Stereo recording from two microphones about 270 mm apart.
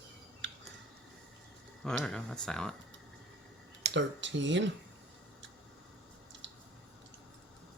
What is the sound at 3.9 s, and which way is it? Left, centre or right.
Speech, right.